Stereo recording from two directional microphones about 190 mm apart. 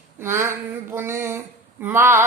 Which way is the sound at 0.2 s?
15° right (ahead or behind).